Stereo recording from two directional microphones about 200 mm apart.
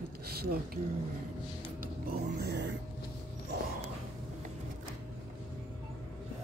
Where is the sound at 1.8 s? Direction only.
50° right (ahead or behind).